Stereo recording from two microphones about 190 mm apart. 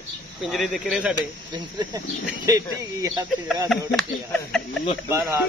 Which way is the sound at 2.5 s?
20° right (ahead or behind).